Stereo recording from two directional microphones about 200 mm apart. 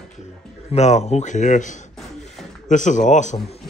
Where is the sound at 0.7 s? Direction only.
35° left (ahead or behind).